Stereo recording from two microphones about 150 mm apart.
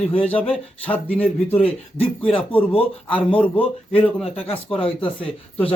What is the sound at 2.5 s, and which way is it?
A man's voice, 40° left (ahead or behind).